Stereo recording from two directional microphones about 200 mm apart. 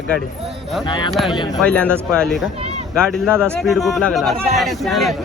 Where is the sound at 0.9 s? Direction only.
20° left (ahead or behind).